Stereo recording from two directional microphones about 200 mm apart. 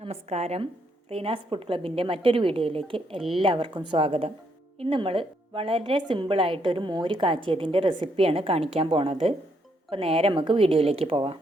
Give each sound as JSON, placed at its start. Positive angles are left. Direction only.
{"t": 0.0, "sound": "a woman's voice", "side_deg": -30}